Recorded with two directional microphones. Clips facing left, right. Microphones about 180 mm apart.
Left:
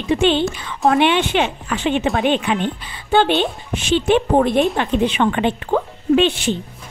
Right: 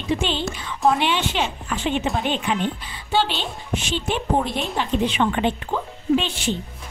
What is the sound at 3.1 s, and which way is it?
Speech, 55° left (ahead or behind).